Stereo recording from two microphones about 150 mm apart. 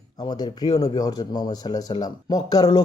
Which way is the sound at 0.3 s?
25° left (ahead or behind).